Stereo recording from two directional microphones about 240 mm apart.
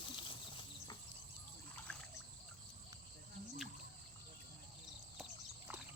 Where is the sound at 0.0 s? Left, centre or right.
Left.